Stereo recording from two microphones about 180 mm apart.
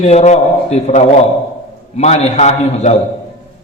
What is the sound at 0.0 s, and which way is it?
A man's voice, 35° left (ahead or behind).